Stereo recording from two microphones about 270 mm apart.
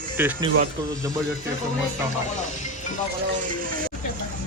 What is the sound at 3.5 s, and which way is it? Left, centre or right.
Speech, right.